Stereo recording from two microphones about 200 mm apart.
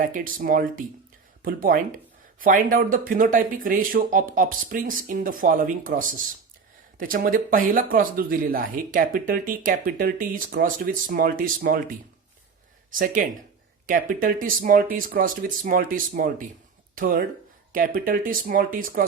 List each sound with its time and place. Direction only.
0.0 s speech: 45° right (ahead or behind)
12.9 s speech: 45° right (ahead or behind)